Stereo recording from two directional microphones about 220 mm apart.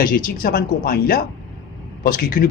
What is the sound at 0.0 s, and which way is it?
A man's voice, 40° left (ahead or behind).